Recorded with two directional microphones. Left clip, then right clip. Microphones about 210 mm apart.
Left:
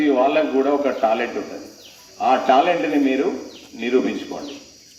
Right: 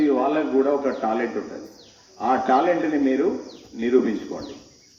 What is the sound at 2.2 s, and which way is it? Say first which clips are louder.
Speech: left 4 dB; 45° right (ahead or behind).